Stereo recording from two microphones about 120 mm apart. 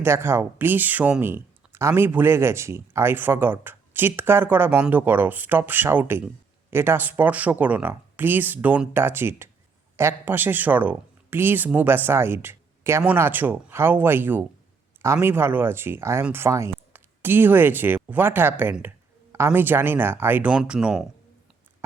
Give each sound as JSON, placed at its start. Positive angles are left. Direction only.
{"t": 0.0, "sound": "speech", "side_deg": -20}